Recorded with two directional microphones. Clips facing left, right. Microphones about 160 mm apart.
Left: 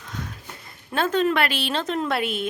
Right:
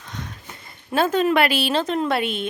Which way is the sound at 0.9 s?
10° right (ahead or behind).